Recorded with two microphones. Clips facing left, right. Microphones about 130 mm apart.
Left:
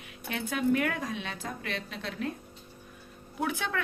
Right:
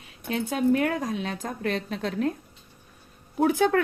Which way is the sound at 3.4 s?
40° right (ahead or behind).